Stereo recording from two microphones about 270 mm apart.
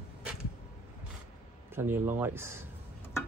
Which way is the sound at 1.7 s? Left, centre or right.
Centre.